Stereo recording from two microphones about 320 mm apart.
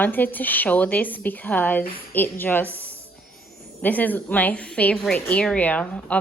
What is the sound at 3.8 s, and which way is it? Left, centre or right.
A woman's voice, centre.